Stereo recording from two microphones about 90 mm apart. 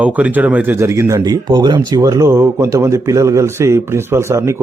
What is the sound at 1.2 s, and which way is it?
Speech, 50° right (ahead or behind).